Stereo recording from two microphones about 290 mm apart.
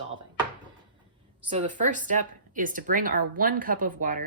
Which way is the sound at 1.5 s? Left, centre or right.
Right.